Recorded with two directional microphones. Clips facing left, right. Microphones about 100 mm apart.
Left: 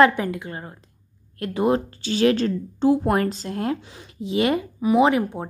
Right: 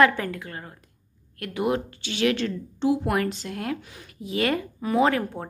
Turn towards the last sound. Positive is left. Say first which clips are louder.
# left 4 dB
turn(degrees=15)  # may be behind; listen again after turning